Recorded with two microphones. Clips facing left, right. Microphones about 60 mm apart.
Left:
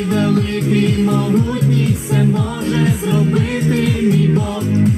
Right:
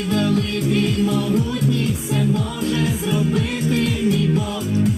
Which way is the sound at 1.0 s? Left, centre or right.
Left.